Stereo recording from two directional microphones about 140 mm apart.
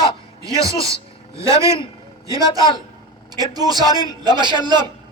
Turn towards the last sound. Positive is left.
turn(degrees=-30)  # may be behind; listen again after turning